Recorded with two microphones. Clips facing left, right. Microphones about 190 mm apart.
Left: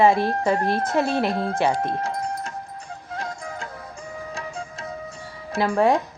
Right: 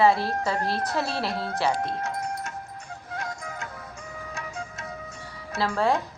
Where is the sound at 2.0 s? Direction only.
30° left (ahead or behind).